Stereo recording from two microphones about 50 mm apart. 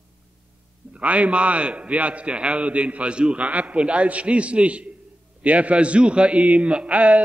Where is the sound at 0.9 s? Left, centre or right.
Right.